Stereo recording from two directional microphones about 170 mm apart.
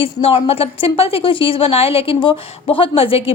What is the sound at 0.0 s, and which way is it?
A woman's voice, 35° left (ahead or behind).